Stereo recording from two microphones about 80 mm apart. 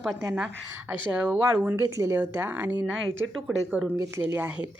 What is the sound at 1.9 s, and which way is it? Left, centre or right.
Speech, right.